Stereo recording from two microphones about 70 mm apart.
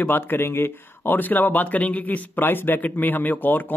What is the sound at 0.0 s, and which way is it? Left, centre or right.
Speech, left.